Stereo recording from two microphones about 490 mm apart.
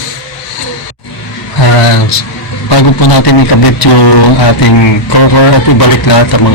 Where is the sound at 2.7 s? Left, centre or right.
Left.